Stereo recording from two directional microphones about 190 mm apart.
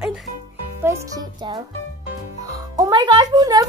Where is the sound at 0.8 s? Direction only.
15° right (ahead or behind).